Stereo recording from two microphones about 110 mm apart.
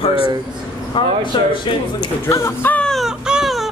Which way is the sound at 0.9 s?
50° left (ahead or behind).